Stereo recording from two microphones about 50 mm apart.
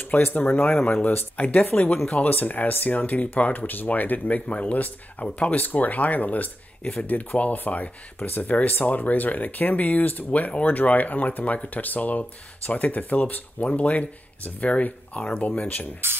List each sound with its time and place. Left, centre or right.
0.0 s speech: left